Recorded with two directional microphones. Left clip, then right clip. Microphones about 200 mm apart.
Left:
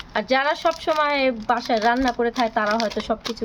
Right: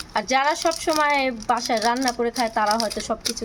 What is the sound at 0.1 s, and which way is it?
Speech, 5° left (ahead or behind).